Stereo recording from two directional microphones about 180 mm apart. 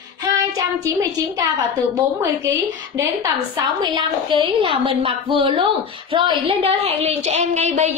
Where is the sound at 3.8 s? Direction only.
25° right (ahead or behind).